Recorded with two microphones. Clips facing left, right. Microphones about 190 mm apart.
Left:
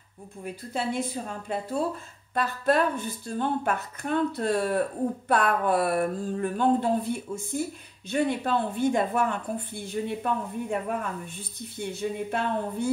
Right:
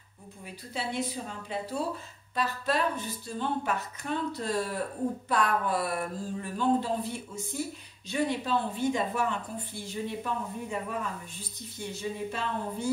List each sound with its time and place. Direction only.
0.7 s a woman's voice: 50° left (ahead or behind)